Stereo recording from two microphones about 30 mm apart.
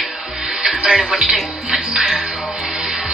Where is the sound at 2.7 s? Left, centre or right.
Centre.